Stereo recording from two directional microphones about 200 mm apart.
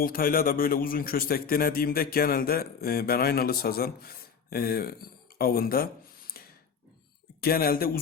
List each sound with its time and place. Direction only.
0.0 s a man's voice: 45° left (ahead or behind)
6.3 s a sound: 50° left (ahead or behind)
7.4 s a man's voice: 50° left (ahead or behind)